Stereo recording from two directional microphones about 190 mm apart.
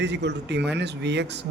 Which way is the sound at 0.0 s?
65° right (ahead or behind).